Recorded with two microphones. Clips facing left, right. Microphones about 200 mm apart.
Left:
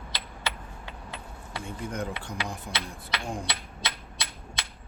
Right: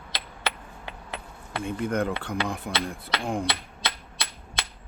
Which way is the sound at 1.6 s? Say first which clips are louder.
Right 7 dB; 60° right (ahead or behind).